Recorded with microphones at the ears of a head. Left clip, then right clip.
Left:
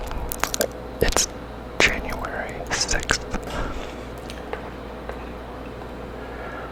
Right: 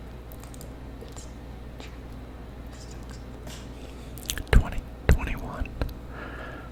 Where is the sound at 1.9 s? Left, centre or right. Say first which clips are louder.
Left 19 dB; left.